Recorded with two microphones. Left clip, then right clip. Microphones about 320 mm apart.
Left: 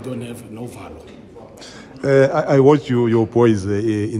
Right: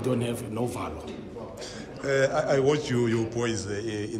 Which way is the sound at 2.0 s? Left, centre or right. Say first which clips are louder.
Left 9 dB; centre.